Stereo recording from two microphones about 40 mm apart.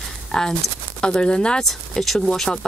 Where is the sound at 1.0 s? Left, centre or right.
Left.